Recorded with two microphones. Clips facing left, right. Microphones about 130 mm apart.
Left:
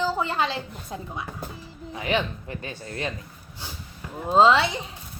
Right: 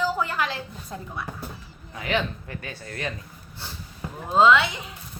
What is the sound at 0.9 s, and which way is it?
Speech, 10° left (ahead or behind).